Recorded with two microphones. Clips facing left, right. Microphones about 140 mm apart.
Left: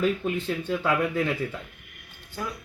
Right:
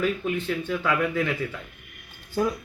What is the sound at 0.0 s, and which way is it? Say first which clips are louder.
Speech: even; 30° left (ahead or behind).